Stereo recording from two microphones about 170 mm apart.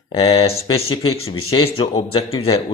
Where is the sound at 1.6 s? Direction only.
35° left (ahead or behind).